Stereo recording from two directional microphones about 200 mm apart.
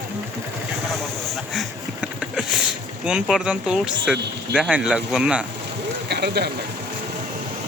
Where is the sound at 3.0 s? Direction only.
5° right (ahead or behind).